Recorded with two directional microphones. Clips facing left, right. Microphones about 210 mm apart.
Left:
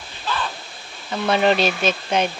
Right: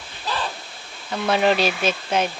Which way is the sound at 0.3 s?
35° right (ahead or behind).